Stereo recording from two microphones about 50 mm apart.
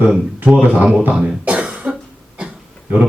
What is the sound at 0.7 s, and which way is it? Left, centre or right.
Speech, centre.